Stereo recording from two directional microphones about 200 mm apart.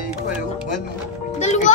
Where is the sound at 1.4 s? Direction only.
35° left (ahead or behind).